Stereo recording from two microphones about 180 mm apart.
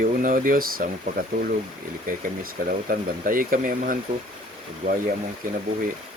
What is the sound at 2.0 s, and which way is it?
Speech, 50° right (ahead or behind).